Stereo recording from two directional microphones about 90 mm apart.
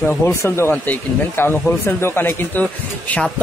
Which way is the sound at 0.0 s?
25° left (ahead or behind).